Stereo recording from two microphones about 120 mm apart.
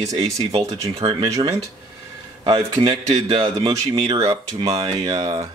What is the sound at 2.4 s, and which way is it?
Speech, 40° right (ahead or behind).